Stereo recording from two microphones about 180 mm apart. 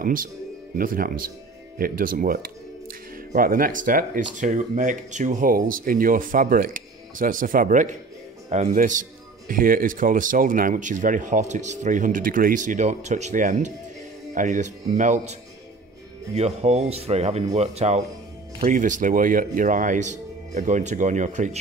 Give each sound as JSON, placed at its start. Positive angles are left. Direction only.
{"t": 0.0, "sound": "speech", "side_deg": -50}
{"t": 16.3, "sound": "speech", "side_deg": -35}